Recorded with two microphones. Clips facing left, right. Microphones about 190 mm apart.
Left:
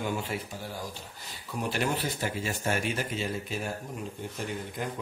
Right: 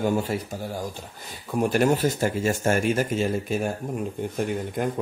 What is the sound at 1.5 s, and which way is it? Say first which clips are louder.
Speech: right 9 dB; 45° right (ahead or behind).